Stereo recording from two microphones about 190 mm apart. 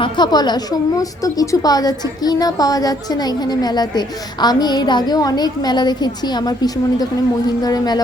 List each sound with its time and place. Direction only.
0.0 s a woman's voice: 20° left (ahead or behind)